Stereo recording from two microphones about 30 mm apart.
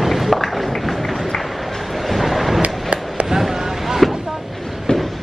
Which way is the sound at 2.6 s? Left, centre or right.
Right.